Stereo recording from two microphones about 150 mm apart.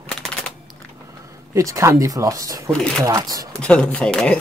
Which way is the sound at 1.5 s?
20° right (ahead or behind).